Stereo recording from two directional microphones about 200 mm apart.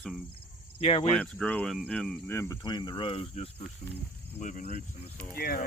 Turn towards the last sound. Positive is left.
turn(degrees=50)  # may be behind; listen again after turning